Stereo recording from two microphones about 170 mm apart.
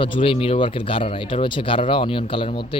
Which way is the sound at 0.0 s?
30° left (ahead or behind).